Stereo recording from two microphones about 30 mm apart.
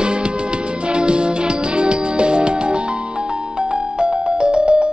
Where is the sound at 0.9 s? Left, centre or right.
Right.